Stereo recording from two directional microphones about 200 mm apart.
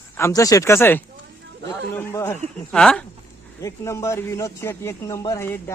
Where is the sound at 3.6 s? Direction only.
15° left (ahead or behind).